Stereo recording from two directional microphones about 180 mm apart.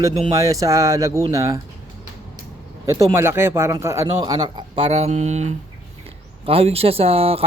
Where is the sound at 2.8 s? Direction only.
15° right (ahead or behind).